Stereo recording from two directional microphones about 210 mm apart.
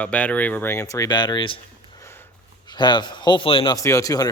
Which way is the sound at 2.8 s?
20° left (ahead or behind).